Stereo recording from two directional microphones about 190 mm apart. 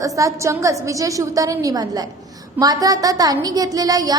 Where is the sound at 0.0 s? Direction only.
15° right (ahead or behind).